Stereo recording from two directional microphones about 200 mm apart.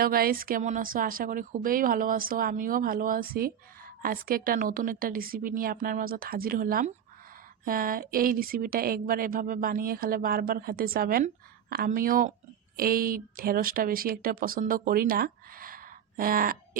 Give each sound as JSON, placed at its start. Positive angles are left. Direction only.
{"t": 0.0, "sound": "speech", "side_deg": -45}